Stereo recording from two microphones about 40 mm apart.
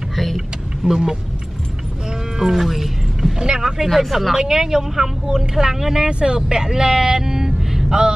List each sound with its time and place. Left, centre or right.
0.1 s vehicle: centre
0.8 s speech: centre
2.3 s a sound: centre
3.3 s vehicle: centre
3.6 s speech: centre
6.0 s speech: right